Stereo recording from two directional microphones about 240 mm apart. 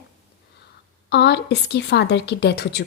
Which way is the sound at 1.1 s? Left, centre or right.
Left.